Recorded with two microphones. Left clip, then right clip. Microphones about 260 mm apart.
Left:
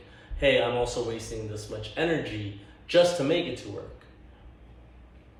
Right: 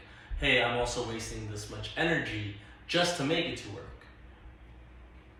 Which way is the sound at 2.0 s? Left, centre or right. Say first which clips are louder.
Left 2 dB; centre.